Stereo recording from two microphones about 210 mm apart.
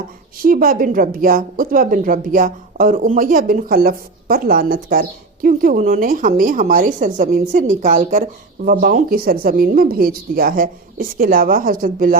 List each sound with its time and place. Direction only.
0.4 s a woman's voice: 45° right (ahead or behind)